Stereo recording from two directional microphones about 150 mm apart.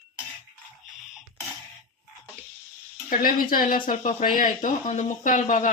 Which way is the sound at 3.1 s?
70° left (ahead or behind).